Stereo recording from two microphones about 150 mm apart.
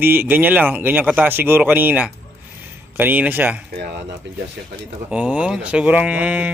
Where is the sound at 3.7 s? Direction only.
90° right.